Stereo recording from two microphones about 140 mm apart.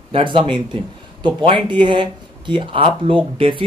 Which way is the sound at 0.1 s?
40° right (ahead or behind).